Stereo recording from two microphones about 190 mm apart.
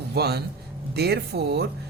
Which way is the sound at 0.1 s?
60° right (ahead or behind).